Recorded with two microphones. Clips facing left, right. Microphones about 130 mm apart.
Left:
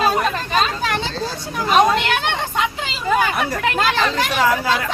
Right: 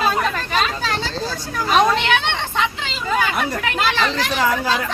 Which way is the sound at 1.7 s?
5° left (ahead or behind).